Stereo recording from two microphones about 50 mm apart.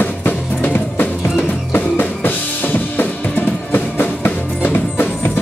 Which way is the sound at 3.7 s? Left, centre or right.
Left.